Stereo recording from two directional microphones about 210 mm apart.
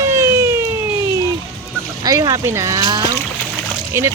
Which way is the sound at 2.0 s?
15° right (ahead or behind).